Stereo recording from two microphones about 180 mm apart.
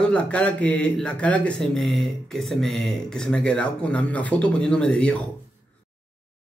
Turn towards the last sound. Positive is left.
turn(degrees=5)  # may be behind; listen again after turning